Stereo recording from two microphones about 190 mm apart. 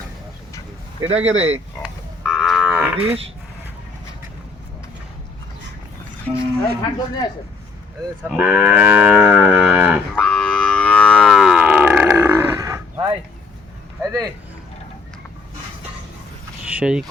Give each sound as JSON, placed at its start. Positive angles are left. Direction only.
{"t": 1.1, "sound": "speech", "side_deg": -35}
{"t": 1.8, "sound": "livestock", "side_deg": 0}
{"t": 6.3, "sound": "speech", "side_deg": 5}
{"t": 8.4, "sound": "livestock", "side_deg": -5}
{"t": 10.2, "sound": "livestock", "side_deg": 5}
{"t": 14.0, "sound": "a sound", "side_deg": -20}
{"t": 16.7, "sound": "speech", "side_deg": -5}